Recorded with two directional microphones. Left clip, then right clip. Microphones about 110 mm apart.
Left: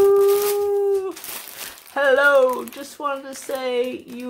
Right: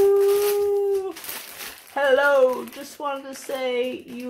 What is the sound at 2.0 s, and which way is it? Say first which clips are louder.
Speech: left 2 dB; 20° left (ahead or behind).